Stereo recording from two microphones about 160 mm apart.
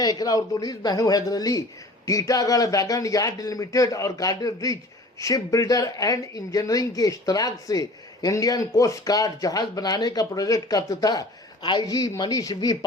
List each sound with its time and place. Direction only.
0.0 s speech: 25° left (ahead or behind)